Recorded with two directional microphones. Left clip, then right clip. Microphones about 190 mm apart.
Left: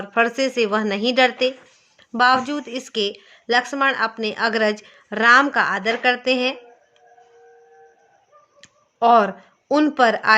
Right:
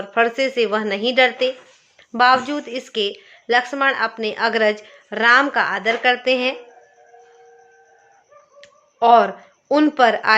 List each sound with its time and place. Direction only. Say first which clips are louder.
0.1 s speech: right 1 dB; 25° left (ahead or behind)
8.6 s speech: right 1 dB; 25° left (ahead or behind)